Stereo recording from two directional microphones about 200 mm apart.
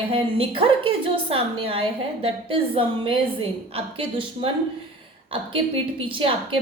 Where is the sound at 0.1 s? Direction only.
30° right (ahead or behind).